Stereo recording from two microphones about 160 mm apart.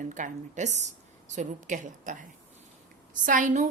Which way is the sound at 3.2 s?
55° right (ahead or behind).